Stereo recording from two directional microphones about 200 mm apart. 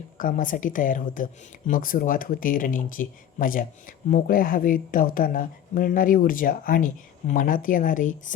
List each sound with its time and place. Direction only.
0.2 s speech: 40° left (ahead or behind)